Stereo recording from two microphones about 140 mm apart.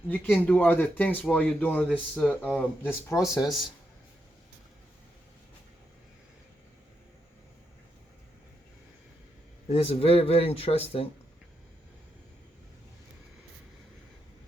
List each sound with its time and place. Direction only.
0.1 s speech: 10° left (ahead or behind)
9.6 s speech: 45° left (ahead or behind)